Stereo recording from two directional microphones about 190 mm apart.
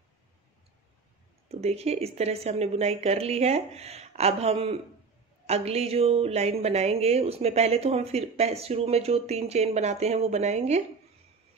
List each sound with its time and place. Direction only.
1.5 s speech: 35° right (ahead or behind)